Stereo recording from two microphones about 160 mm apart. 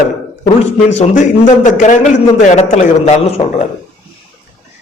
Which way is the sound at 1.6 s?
50° left (ahead or behind).